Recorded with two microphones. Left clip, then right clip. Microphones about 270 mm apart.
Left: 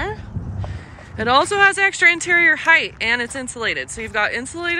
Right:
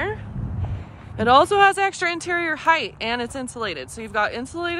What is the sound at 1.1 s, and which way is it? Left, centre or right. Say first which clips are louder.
Speech: right 1 dB; centre.